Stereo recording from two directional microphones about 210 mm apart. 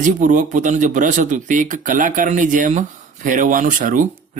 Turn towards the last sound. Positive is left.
turn(degrees=-40)  # may be behind; listen again after turning